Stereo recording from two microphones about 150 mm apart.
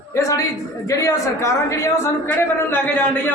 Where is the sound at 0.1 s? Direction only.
20° left (ahead or behind).